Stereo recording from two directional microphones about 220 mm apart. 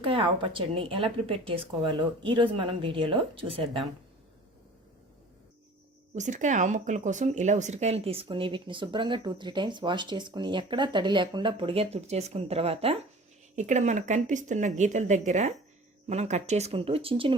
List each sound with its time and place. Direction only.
0.0 s speech: 25° right (ahead or behind)
6.1 s speech: 35° right (ahead or behind)